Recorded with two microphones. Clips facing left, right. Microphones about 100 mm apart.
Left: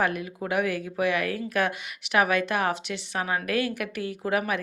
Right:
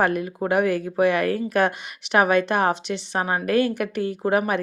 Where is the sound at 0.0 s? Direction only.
40° right (ahead or behind).